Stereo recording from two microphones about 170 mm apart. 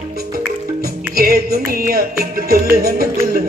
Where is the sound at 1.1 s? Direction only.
65° right (ahead or behind).